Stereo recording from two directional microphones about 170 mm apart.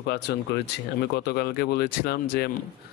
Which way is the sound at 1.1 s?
70° left (ahead or behind).